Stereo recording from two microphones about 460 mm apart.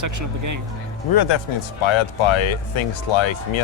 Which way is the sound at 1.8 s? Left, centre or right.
Left.